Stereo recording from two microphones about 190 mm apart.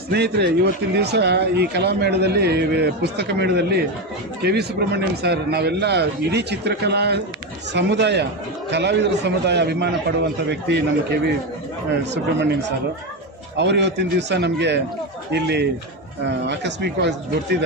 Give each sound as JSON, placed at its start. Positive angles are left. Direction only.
{"t": 0.1, "sound": "speech", "side_deg": -60}
{"t": 13.6, "sound": "speech", "side_deg": -65}